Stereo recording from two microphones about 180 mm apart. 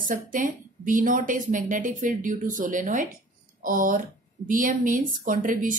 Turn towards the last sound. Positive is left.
turn(degrees=-45)  # may be behind; listen again after turning